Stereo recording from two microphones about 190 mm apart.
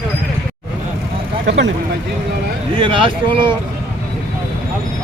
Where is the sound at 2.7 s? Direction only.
25° right (ahead or behind).